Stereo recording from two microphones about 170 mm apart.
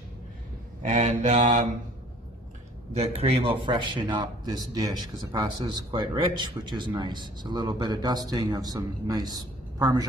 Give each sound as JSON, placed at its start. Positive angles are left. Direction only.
{"t": 0.8, "sound": "mantra", "side_deg": -45}
{"t": 3.0, "sound": "a man's voice", "side_deg": -35}